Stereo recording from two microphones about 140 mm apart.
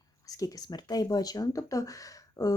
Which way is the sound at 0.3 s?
25° left (ahead or behind).